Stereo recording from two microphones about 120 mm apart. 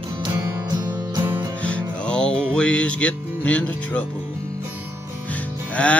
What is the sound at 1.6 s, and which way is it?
Music, 10° left (ahead or behind).